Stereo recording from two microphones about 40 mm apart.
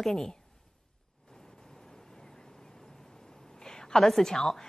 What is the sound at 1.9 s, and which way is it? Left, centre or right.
Vehicle, centre.